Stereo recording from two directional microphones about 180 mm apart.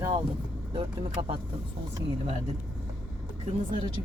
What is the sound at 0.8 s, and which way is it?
Speech, 30° right (ahead or behind).